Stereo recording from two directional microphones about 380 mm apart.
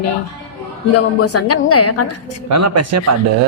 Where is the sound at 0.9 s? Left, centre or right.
Left.